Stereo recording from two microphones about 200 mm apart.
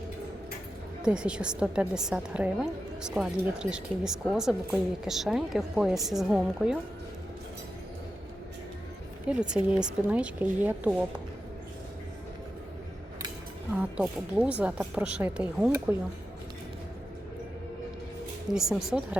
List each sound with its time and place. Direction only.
1.0 s a woman's voice: 5° right (ahead or behind)
9.3 s a woman's voice: 5° right (ahead or behind)
13.7 s speech: 5° right (ahead or behind)
18.5 s a woman's voice: centre (ahead or behind)